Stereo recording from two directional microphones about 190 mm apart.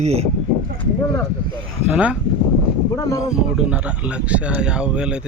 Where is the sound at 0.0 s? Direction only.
35° right (ahead or behind).